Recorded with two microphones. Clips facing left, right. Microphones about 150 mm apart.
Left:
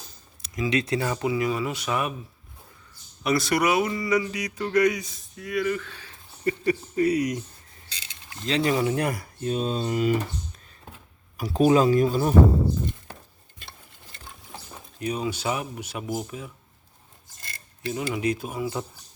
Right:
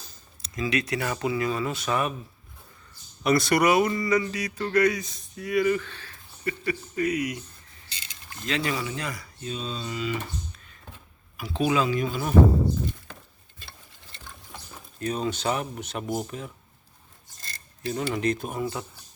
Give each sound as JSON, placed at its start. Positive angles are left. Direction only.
{"t": 0.4, "sound": "speech", "side_deg": 15}
{"t": 3.2, "sound": "speech", "side_deg": 0}
{"t": 5.4, "sound": "speech", "side_deg": 0}
{"t": 5.9, "sound": "speech", "side_deg": 15}
{"t": 6.4, "sound": "speech", "side_deg": 35}
{"t": 8.4, "sound": "speech", "side_deg": 35}
{"t": 11.3, "sound": "speech", "side_deg": 40}
{"t": 14.5, "sound": "speech", "side_deg": 10}
{"t": 17.8, "sound": "speech", "side_deg": 5}